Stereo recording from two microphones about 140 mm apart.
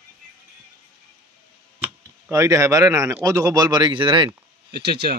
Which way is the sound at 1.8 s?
15° right (ahead or behind).